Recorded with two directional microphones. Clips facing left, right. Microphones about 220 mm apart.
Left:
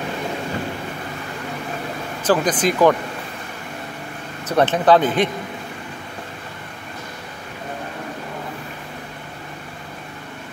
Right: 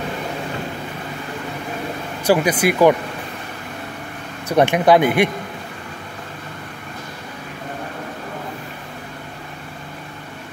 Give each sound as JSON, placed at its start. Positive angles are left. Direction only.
{"t": 2.2, "sound": "speech", "side_deg": -10}
{"t": 4.5, "sound": "speech", "side_deg": -10}